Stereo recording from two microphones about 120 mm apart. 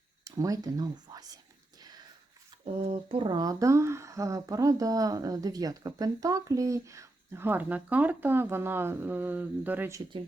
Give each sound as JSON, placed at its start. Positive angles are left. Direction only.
{"t": 0.3, "sound": "speech", "side_deg": -30}
{"t": 2.8, "sound": "speech", "side_deg": -50}
{"t": 3.2, "sound": "speech", "side_deg": -30}